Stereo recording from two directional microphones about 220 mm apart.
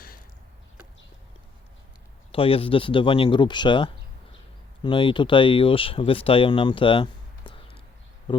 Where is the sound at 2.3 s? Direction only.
25° left (ahead or behind).